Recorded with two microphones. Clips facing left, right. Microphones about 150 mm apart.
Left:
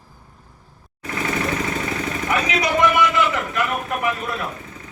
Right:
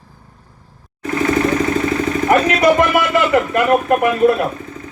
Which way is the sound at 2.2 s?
55° right (ahead or behind).